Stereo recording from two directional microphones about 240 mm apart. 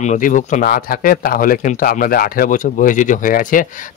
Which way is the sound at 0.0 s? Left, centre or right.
Left.